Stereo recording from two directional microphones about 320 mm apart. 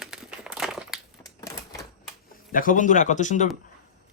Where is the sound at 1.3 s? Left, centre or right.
Centre.